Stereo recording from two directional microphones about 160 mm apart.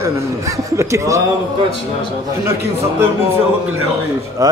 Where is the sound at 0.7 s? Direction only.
20° right (ahead or behind).